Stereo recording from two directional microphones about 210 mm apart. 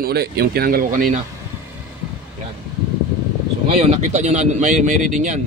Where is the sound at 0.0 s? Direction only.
50° right (ahead or behind).